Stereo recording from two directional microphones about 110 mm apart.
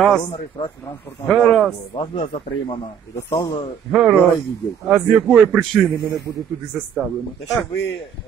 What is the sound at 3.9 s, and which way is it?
Speech, 10° right (ahead or behind).